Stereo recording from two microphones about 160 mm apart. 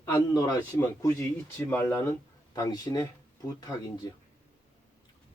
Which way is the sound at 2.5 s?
25° left (ahead or behind).